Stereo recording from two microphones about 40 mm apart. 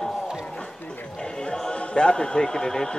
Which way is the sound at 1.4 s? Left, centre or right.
Left.